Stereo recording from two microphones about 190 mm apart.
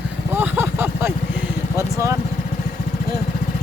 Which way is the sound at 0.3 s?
10° right (ahead or behind).